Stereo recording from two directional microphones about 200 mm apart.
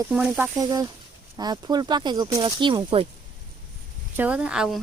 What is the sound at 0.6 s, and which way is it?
Speech, 20° right (ahead or behind).